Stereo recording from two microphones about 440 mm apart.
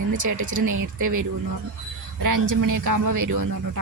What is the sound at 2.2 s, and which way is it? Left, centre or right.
Speech, right.